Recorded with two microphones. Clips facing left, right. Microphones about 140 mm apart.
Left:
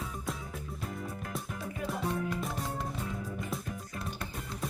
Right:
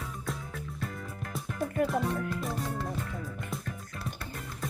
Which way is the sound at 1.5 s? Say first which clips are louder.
Right 14 dB; 55° right (ahead or behind).